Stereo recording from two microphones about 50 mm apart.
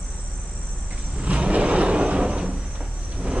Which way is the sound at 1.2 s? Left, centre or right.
Right.